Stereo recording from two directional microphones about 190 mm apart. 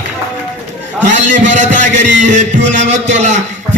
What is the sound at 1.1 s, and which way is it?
Speech, 40° right (ahead or behind).